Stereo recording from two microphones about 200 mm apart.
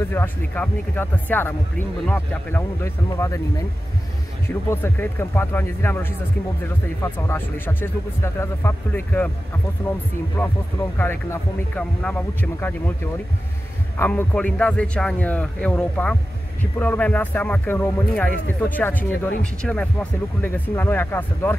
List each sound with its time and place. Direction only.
0.1 s speech: 10° left (ahead or behind)
4.6 s a man's voice: 10° left (ahead or behind)